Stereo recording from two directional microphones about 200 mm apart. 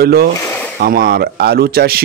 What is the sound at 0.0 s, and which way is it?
Speech, 50° right (ahead or behind).